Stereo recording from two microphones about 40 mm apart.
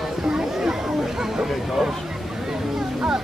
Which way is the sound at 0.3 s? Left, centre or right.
Centre.